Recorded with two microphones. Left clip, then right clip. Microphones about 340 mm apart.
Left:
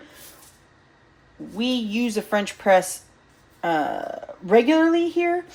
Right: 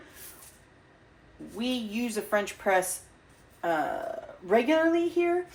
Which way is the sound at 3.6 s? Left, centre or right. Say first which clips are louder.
Left 5 dB; left.